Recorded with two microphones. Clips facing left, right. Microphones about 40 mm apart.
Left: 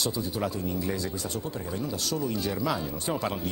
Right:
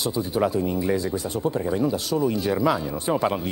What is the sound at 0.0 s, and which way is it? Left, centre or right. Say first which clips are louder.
A man's voice: right 6 dB; right.